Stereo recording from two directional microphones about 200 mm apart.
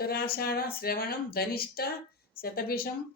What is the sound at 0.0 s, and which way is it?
Speech, 50° left (ahead or behind).